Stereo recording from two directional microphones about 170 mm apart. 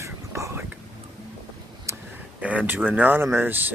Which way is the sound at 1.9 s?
15° right (ahead or behind).